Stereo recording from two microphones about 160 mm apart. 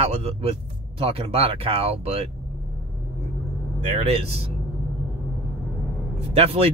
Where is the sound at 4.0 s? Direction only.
40° right (ahead or behind).